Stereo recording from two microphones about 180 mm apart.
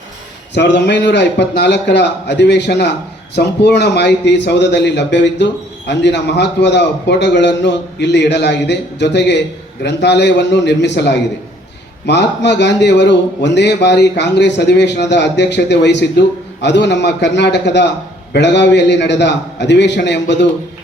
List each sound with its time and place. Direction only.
0.5 s a man's voice: 70° left (ahead or behind)